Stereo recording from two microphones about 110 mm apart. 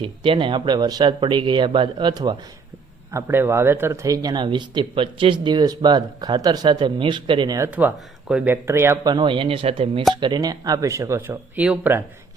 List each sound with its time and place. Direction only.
0.0 s speech: 50° right (ahead or behind)
3.1 s speech: 25° right (ahead or behind); by 7.6 s 40° right (ahead or behind)
7.6 s speech: 20° right (ahead or behind)
9.0 s speech: 45° right (ahead or behind)
10.2 s speech: 40° right (ahead or behind)
11.5 s speech: 10° right (ahead or behind)